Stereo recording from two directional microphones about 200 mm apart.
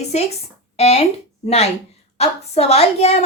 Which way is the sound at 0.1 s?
30° left (ahead or behind).